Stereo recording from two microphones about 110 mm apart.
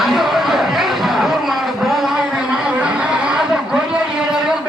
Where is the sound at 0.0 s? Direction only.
Centre (ahead or behind).